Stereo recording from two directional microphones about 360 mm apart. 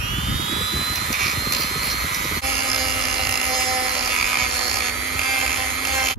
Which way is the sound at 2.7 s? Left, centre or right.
Centre.